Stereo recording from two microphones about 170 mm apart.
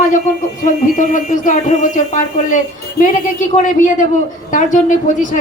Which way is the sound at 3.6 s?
45° left (ahead or behind).